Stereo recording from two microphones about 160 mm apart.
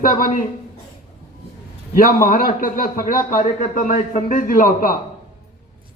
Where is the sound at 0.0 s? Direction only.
60° left (ahead or behind).